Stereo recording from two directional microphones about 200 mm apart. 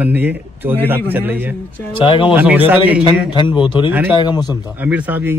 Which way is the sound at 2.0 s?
25° left (ahead or behind).